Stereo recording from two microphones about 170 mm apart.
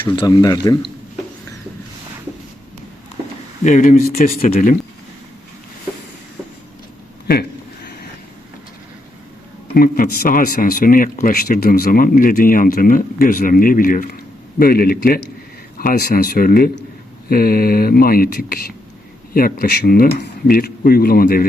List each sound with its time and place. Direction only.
0.2 s speech: 25° left (ahead or behind)
3.6 s speech: 45° left (ahead or behind)
9.7 s speech: 60° left (ahead or behind)